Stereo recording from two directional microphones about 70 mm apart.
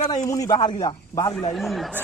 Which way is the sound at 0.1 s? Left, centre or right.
Left.